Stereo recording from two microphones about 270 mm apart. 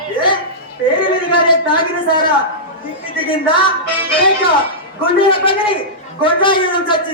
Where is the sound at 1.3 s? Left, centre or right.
Centre.